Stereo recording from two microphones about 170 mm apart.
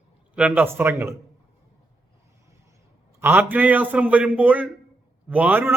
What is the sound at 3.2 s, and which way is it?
A man's voice, 10° right (ahead or behind).